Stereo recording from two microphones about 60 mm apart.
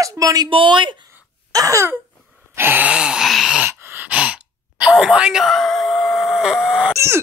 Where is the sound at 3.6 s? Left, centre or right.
Right.